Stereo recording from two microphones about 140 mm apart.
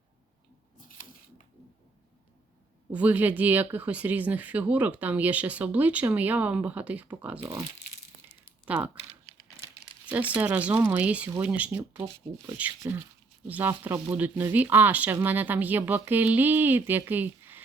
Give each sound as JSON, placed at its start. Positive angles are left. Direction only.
{"t": 2.9, "sound": "speech", "side_deg": -10}
{"t": 8.6, "sound": "speech", "side_deg": -10}
{"t": 10.1, "sound": "speech", "side_deg": -10}